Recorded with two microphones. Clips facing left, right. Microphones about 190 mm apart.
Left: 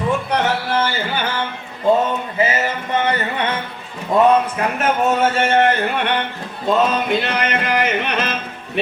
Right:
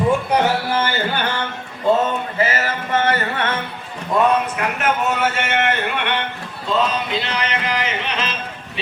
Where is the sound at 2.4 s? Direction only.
15° left (ahead or behind).